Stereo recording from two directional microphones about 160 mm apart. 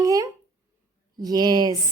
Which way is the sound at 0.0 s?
20° right (ahead or behind).